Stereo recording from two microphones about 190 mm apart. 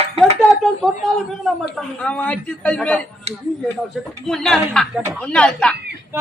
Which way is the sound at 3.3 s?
30° right (ahead or behind).